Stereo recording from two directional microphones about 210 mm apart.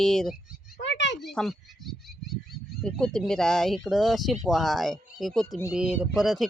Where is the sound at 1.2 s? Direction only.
Centre (ahead or behind).